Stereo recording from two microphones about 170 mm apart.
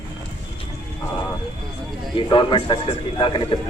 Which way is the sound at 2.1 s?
30° left (ahead or behind).